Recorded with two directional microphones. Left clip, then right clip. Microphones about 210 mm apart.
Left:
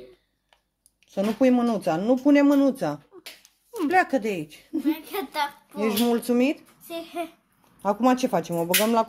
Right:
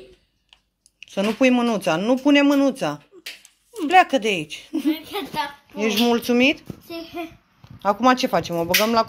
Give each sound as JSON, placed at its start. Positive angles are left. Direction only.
{"t": 0.9, "sound": "speech", "side_deg": -5}
{"t": 4.8, "sound": "a woman's voice", "side_deg": 40}
{"t": 5.8, "sound": "speech", "side_deg": 0}